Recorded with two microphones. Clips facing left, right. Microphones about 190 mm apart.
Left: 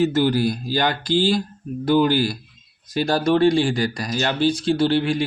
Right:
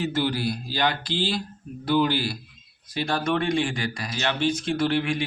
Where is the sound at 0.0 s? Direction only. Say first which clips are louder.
Left 7 dB; 45° left (ahead or behind).